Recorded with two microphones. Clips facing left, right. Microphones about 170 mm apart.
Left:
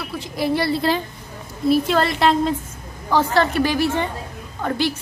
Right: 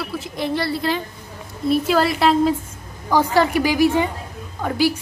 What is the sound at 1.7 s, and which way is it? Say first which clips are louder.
A woman's voice: even; 5° right (ahead or behind).